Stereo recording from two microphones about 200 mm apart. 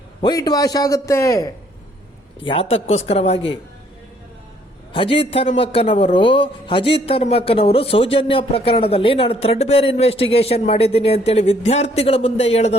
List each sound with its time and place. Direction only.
0.2 s a man's voice: 20° left (ahead or behind)
2.4 s a man's voice: 25° left (ahead or behind)
4.9 s a man's voice: 25° left (ahead or behind)